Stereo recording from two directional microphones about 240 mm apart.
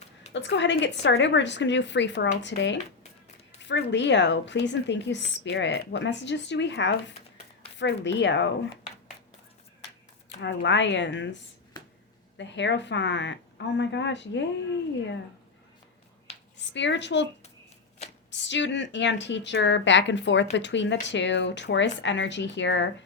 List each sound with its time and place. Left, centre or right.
0.3 s a woman's voice: left
10.2 s a woman's voice: left
12.4 s a woman's voice: left
16.6 s speech: left
18.3 s a woman's voice: left